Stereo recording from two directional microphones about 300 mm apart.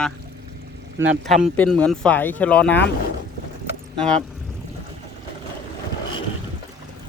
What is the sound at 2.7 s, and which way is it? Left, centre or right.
Speech, left.